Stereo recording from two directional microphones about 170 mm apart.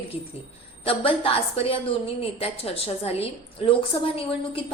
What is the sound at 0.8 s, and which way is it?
A woman's voice, 35° left (ahead or behind).